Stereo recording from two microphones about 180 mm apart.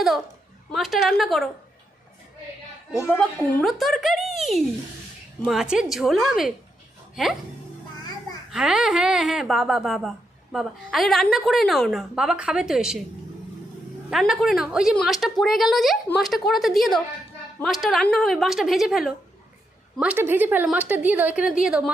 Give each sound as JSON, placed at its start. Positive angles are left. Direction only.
{"t": 0.7, "sound": "a woman's voice", "side_deg": 0}
{"t": 2.9, "sound": "a woman's voice", "side_deg": 15}
{"t": 3.6, "sound": "a woman's voice", "side_deg": 0}
{"t": 8.4, "sound": "a woman's voice", "side_deg": -5}
{"t": 14.1, "sound": "a woman's voice", "side_deg": 0}